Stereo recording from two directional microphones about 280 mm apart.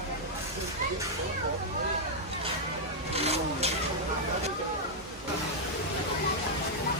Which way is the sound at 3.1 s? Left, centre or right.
Right.